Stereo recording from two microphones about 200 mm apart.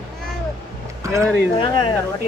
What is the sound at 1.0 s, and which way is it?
Speech, 15° right (ahead or behind).